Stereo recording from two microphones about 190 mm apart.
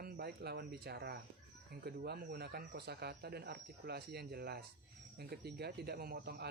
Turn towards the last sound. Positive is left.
turn(degrees=-55)  # may be behind; listen again after turning